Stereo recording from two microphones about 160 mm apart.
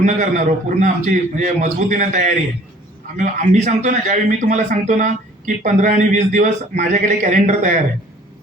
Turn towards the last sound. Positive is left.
turn(degrees=-50)  # may be behind; listen again after turning